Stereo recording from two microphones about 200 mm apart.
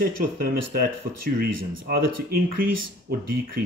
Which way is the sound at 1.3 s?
45° right (ahead or behind).